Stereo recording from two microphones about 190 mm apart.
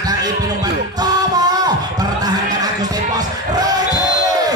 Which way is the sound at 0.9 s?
20° right (ahead or behind).